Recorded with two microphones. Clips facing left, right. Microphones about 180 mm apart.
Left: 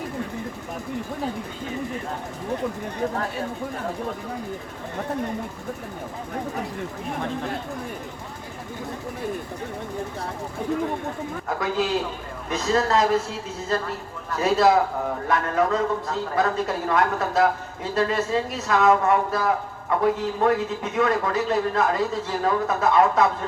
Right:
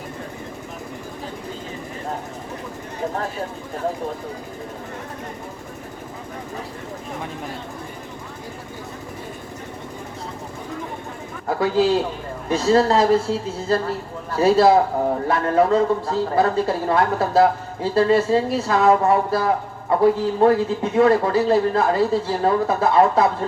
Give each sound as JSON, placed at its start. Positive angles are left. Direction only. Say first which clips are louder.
{"t": 11.4, "sound": "a man's voice", "louder": "right 7 dB", "side_deg": -30}